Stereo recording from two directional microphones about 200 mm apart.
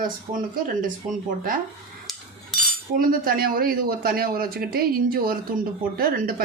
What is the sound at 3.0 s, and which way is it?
Speech, 45° right (ahead or behind).